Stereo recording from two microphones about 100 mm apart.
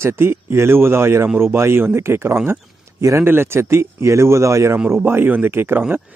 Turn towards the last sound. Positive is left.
turn(degrees=-25)  # may be behind; listen again after turning